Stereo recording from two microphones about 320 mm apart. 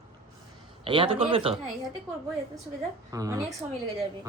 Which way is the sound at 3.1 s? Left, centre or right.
Centre.